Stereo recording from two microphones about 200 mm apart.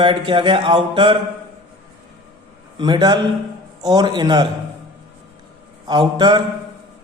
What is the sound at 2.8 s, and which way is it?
A man's voice, 20° right (ahead or behind).